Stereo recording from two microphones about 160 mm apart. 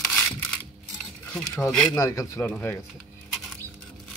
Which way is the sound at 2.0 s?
20° left (ahead or behind).